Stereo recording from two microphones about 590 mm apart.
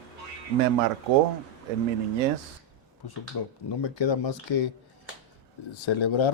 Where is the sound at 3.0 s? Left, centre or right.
Left.